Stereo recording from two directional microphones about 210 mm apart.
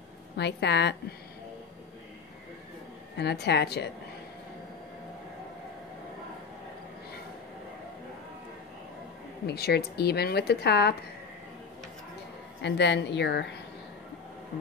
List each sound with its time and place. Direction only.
0.4 s speech: 55° left (ahead or behind)
3.2 s speech: 50° left (ahead or behind)
9.5 s speech: 50° left (ahead or behind)
12.6 s speech: 55° left (ahead or behind)